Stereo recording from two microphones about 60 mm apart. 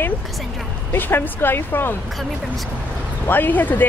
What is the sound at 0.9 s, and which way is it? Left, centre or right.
Speech, left.